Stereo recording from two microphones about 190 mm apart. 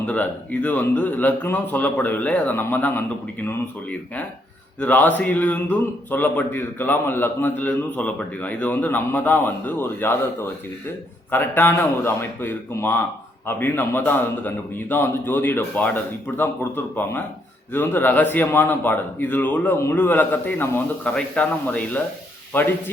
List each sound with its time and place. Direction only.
0.1 s a man's voice: 10° left (ahead or behind)
11.3 s a man's voice: 10° left (ahead or behind)